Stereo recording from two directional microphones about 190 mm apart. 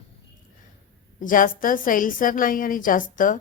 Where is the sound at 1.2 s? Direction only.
45° left (ahead or behind).